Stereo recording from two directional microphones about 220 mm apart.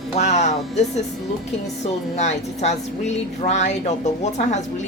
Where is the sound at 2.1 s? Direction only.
30° left (ahead or behind).